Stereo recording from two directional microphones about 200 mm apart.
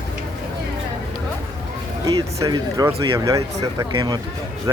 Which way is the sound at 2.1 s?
20° right (ahead or behind).